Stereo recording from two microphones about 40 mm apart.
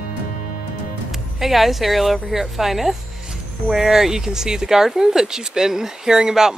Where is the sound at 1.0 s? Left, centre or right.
Centre.